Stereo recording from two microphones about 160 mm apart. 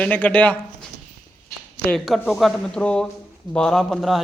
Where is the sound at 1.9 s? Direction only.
Centre (ahead or behind).